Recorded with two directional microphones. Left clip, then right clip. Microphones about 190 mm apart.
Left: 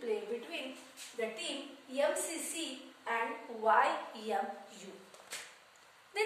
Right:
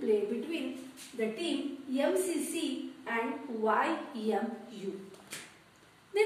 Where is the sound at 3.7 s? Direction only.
20° left (ahead or behind).